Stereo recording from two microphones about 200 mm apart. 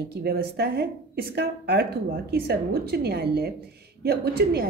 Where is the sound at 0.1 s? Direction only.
50° right (ahead or behind).